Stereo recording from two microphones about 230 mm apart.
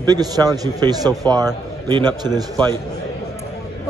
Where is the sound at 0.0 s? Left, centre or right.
Centre.